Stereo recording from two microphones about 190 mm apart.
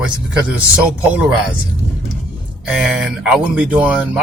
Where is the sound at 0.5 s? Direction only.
5° right (ahead or behind).